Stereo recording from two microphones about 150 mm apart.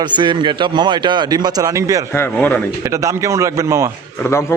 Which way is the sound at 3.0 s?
20° right (ahead or behind).